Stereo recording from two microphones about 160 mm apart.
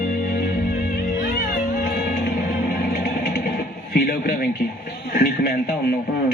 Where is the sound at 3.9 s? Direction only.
65° left (ahead or behind).